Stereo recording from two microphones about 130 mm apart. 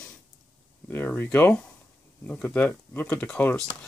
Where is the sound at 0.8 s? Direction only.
15° left (ahead or behind).